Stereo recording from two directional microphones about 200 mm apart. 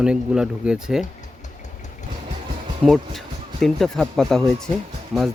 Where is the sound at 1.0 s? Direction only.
35° left (ahead or behind).